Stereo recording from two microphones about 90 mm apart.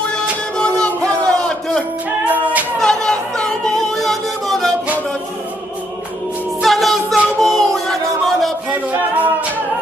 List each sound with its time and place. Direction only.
0.1 s music: 10° left (ahead or behind)
2.2 s music: 20° right (ahead or behind)
2.8 s music: 5° left (ahead or behind)
6.6 s music: centre (ahead or behind)
8.6 s music: 15° right (ahead or behind)